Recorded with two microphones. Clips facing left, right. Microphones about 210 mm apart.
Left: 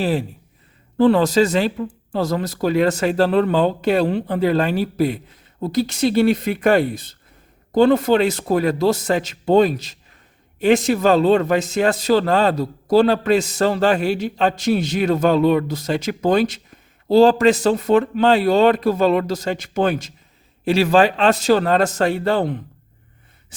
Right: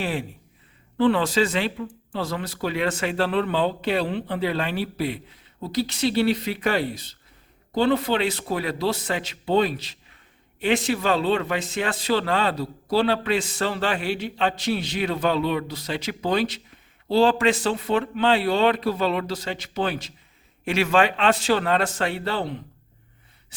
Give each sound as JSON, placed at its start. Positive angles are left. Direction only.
{"t": 0.0, "sound": "a man's voice", "side_deg": 40}
{"t": 20.7, "sound": "a man's voice", "side_deg": 35}
{"t": 23.5, "sound": "gasp", "side_deg": 45}